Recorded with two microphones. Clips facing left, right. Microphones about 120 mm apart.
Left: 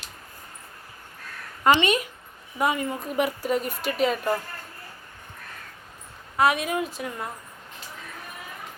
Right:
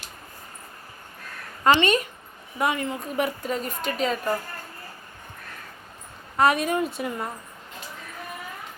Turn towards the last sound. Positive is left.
turn(degrees=0)  # may be behind; listen again after turning